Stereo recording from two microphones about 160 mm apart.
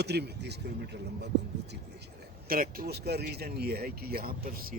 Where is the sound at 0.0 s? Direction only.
90° right.